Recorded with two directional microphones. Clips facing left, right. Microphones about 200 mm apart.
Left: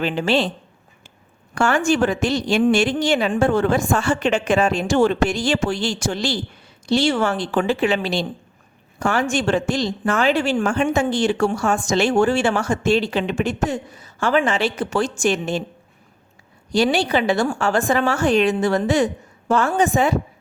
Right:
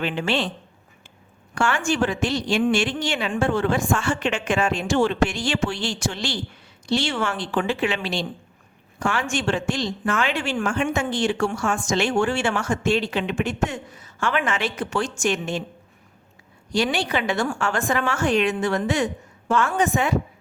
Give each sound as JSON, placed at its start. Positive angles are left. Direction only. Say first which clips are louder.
{"t": 0.0, "sound": "speech", "louder": "left 4 dB", "side_deg": 35}
{"t": 1.5, "sound": "speech", "louder": "left 4 dB", "side_deg": 40}
{"t": 16.7, "sound": "speech", "louder": "left 5 dB", "side_deg": 35}